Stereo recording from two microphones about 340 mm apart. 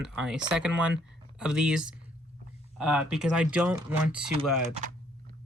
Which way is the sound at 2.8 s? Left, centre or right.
Centre.